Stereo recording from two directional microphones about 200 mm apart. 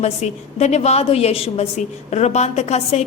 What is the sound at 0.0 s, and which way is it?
A woman's voice, 35° left (ahead or behind).